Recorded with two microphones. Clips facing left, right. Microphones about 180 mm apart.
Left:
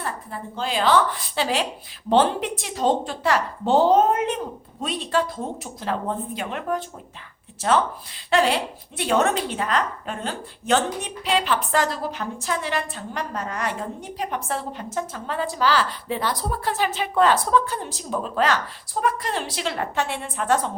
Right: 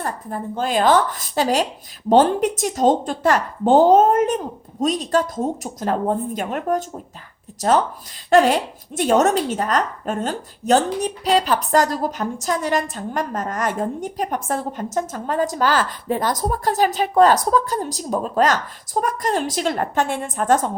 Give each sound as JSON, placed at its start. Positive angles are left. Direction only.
{"t": 0.0, "sound": "a woman's voice", "side_deg": -45}